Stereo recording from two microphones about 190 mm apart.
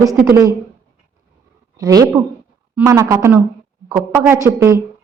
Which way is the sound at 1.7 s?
15° right (ahead or behind).